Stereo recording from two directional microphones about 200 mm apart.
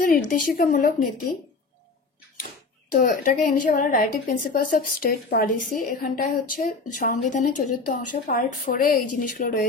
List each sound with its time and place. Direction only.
0.0 s a woman's voice: 45° left (ahead or behind)
2.9 s a woman's voice: 40° left (ahead or behind)